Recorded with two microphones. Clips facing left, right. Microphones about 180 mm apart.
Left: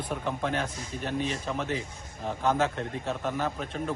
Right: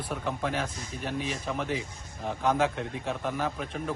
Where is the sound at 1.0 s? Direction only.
10° right (ahead or behind).